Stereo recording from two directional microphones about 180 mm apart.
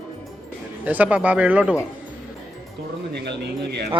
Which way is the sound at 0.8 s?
10° right (ahead or behind).